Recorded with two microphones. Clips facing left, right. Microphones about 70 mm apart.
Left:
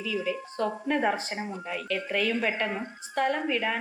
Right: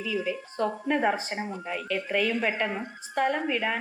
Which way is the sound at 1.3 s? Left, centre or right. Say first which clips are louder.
Right 1 dB; right.